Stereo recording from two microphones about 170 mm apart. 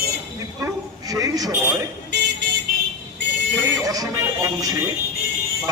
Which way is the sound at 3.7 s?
20° right (ahead or behind).